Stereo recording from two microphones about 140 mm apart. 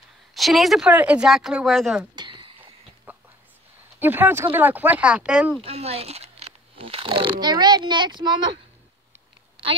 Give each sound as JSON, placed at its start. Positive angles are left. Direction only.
{"t": 0.3, "sound": "speech", "side_deg": 0}
{"t": 2.1, "sound": "a sound", "side_deg": -35}
{"t": 3.1, "sound": "whispering", "side_deg": -10}
{"t": 4.0, "sound": "speech", "side_deg": -15}
{"t": 5.6, "sound": "speech", "side_deg": -45}